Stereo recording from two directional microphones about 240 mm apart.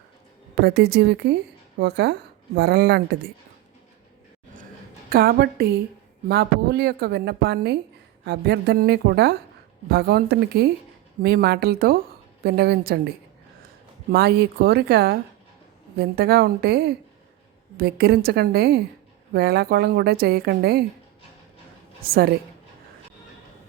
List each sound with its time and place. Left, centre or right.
0.6 s a woman's voice: right
5.0 s a woman's voice: right
14.1 s speech: right
22.0 s speech: right